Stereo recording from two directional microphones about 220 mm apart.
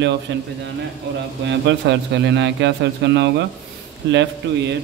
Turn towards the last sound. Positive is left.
turn(degrees=-55)  # may be behind; listen again after turning